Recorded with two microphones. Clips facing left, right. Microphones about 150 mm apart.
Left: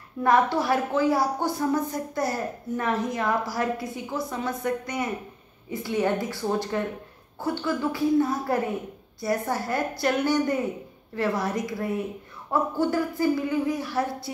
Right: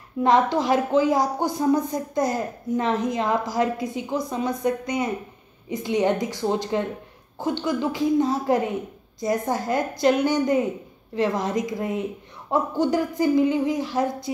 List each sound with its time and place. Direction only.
0.2 s speech: 20° right (ahead or behind)